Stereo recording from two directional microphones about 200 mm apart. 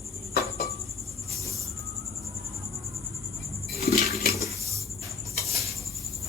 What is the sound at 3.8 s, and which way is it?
Dishes, 50° left (ahead or behind).